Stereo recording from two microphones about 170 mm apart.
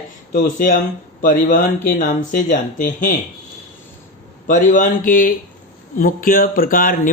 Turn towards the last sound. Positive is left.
turn(degrees=55)  # may be behind; listen again after turning